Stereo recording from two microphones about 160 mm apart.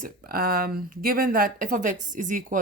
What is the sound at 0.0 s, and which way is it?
Speech, 70° right (ahead or behind).